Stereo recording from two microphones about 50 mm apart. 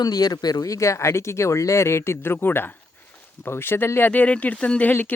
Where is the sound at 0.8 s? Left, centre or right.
Left.